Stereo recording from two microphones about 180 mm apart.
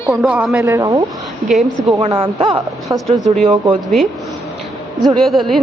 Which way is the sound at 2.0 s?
30° right (ahead or behind).